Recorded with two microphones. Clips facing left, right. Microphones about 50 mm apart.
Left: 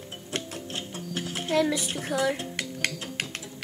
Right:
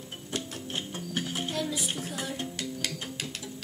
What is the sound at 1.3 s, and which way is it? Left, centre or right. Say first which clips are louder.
Speech: left 11 dB; left.